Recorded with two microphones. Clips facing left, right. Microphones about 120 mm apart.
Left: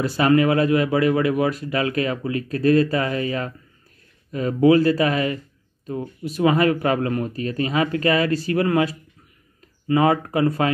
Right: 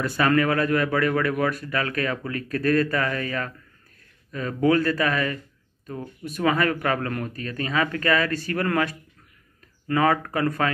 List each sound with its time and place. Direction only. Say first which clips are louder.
0.0 s speech: left 4 dB; 30° left (ahead or behind)